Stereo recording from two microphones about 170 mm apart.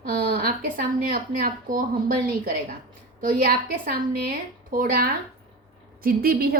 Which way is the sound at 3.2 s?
55° right (ahead or behind).